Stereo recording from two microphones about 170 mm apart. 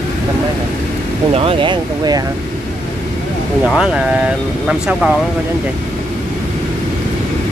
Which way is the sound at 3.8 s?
5° right (ahead or behind).